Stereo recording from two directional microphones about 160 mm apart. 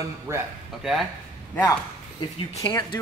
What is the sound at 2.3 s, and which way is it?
Speech, 35° left (ahead or behind).